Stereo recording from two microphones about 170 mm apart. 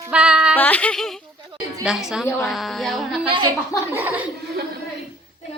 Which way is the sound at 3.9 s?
10° right (ahead or behind).